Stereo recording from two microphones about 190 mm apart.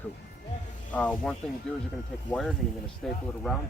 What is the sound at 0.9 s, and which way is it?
Speech, 5° left (ahead or behind).